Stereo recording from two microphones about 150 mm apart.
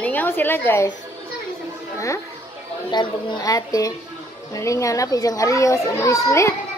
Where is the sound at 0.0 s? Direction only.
10° left (ahead or behind).